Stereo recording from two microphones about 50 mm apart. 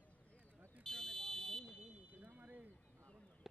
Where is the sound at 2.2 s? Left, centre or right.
Right.